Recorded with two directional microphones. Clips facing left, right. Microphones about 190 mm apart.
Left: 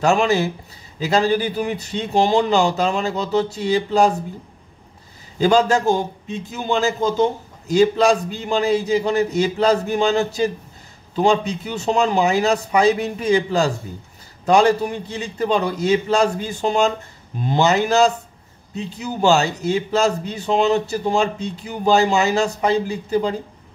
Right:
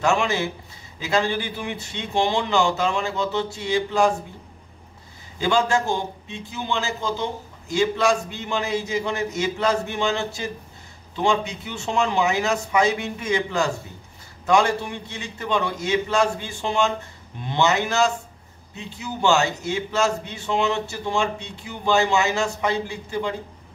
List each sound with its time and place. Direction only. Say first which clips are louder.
0.0 s a man's voice: left 5 dB; 35° left (ahead or behind)
5.4 s a man's voice: left 5 dB; 40° left (ahead or behind)